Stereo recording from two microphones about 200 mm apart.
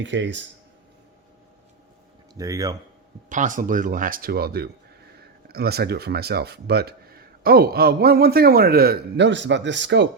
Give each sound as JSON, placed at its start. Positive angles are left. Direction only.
{"t": 0.0, "sound": "speech", "side_deg": -65}
{"t": 2.4, "sound": "speech", "side_deg": -15}
{"t": 3.2, "sound": "speech", "side_deg": -40}